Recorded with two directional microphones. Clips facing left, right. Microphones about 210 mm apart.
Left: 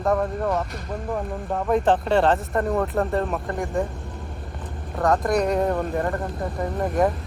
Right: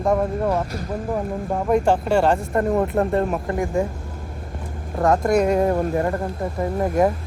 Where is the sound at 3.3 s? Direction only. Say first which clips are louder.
Right 3 dB; centre (ahead or behind).